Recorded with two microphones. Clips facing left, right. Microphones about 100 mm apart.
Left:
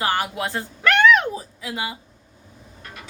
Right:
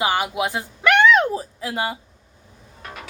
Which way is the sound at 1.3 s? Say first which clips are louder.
Right 4 dB; 40° right (ahead or behind).